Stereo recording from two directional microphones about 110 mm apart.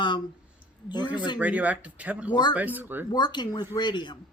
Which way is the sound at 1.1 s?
40° left (ahead or behind).